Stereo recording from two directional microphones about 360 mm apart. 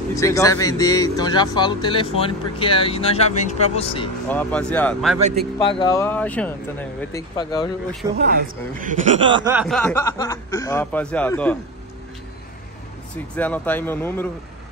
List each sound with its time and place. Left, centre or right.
0.1 s a man's voice: centre
5.2 s speech: centre
5.6 s a man's voice: centre
8.7 s speech: right
9.5 s speech: centre
13.1 s speech: centre